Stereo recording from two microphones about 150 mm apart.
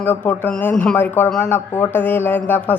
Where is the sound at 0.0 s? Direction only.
15° left (ahead or behind).